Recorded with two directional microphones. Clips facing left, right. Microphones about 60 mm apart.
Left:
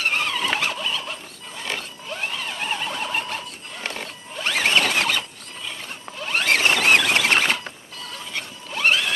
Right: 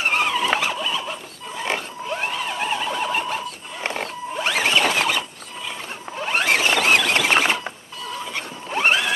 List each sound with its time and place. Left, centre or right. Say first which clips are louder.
0.0 s vehicle: right 3 dB; centre
1.6 s pig: right 5 dB; right
2.3 s vehicle: right 3 dB; centre
3.8 s mechanisms: right 6 dB; right
4.5 s a sound: even; centre
4.8 s squeal: right 2 dB; centre
6.1 s zipper: right 3 dB; right
6.6 s rodents: even; centre
7.6 s chicken: right 4 dB; centre
8.6 s a sound: right 2 dB; right